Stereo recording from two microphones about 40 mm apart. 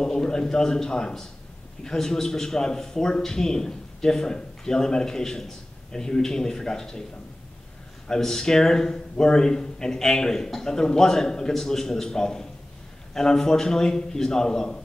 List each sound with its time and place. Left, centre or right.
0.0 s a man's voice: centre
8.1 s a man's voice: centre